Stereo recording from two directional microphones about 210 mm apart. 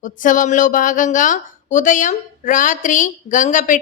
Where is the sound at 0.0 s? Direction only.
40° left (ahead or behind).